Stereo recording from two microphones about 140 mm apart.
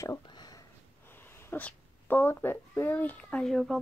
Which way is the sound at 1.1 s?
15° left (ahead or behind).